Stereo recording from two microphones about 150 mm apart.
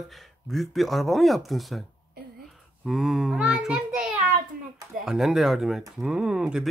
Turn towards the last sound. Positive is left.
turn(degrees=-5)  # may be behind; listen again after turning